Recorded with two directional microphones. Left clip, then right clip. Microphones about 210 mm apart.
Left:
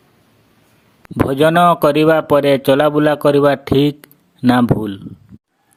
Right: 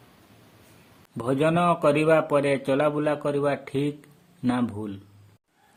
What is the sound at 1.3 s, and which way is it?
A man's voice, 45° left (ahead or behind).